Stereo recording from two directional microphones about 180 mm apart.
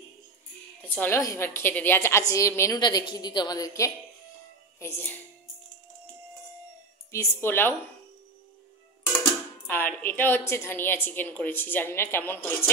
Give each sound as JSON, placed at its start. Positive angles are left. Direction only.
{"t": 0.8, "sound": "a woman's voice", "side_deg": 10}
{"t": 7.1, "sound": "a woman's voice", "side_deg": 15}
{"t": 9.7, "sound": "a woman's voice", "side_deg": 10}